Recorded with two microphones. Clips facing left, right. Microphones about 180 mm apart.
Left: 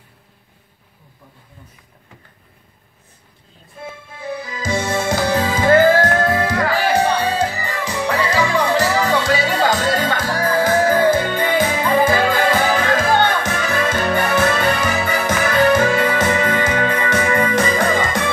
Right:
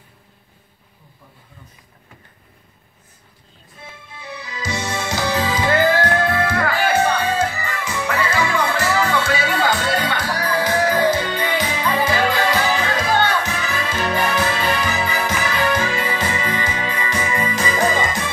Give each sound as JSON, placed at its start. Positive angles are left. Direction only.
{"t": 3.8, "sound": "music", "side_deg": 50}